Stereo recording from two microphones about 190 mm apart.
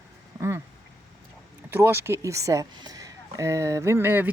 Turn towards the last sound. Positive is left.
turn(degrees=-10)  # may be behind; listen again after turning